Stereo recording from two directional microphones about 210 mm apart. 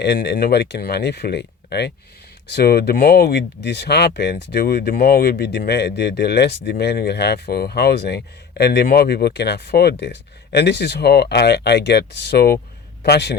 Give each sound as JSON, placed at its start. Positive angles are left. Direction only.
{"t": 0.0, "sound": "a man's voice", "side_deg": 55}